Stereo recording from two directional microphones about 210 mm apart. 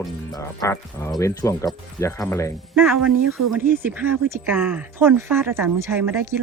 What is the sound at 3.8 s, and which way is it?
Speech, 10° right (ahead or behind).